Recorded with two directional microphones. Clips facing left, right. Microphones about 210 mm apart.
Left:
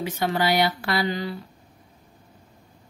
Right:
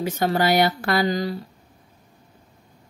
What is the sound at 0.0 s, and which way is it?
Speech, 45° right (ahead or behind).